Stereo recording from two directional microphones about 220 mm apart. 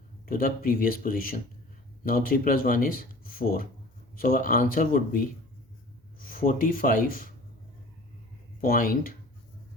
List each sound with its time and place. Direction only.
0.3 s speech: 40° left (ahead or behind)
8.6 s speech: 40° left (ahead or behind)